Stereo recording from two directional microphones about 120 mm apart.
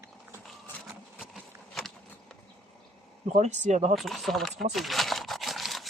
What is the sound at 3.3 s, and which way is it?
Speech, 80° right.